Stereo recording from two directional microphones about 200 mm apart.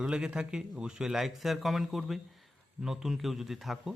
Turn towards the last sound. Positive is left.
turn(degrees=0)  # may be behind; listen again after turning